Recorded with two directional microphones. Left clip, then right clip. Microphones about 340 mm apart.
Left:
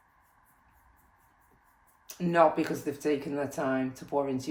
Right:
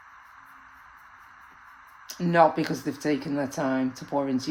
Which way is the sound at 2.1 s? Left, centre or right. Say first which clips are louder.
Right 3 dB; right.